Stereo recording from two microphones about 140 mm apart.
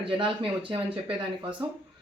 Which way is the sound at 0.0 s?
40° right (ahead or behind).